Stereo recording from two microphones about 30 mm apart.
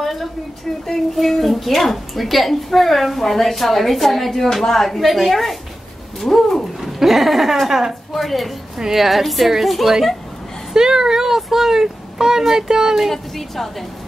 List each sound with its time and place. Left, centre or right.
0.0 s a sound: centre
0.8 s a woman's voice: centre
6.6 s a woman's voice: centre
8.1 s a woman's voice: centre
10.7 s speech: centre
13.1 s a woman's voice: centre